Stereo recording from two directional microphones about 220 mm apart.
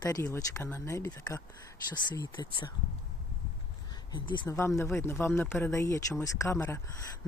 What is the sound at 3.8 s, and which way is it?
Speech, 20° left (ahead or behind).